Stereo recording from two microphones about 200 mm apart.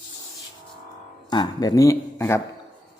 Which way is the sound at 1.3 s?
20° left (ahead or behind).